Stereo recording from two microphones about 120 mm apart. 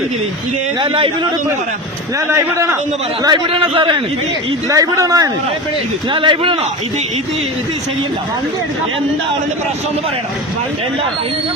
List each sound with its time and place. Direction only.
0.8 s a man's voice: 45° right (ahead or behind)
2.1 s a man's voice: 25° right (ahead or behind)
3.2 s a man's voice: 40° right (ahead or behind)
4.7 s a man's voice: 30° right (ahead or behind)
6.1 s a man's voice: 45° right (ahead or behind)